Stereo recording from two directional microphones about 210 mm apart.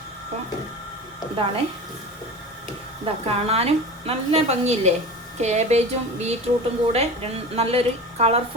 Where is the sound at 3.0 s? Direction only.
30° right (ahead or behind).